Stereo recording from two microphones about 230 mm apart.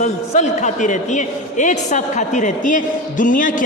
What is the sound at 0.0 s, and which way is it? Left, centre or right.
A man's voice, left.